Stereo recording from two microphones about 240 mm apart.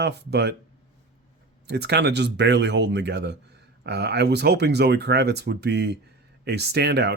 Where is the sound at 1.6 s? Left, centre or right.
Right.